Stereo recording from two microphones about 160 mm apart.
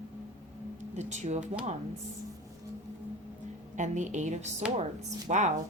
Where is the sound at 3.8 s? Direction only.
50° right (ahead or behind).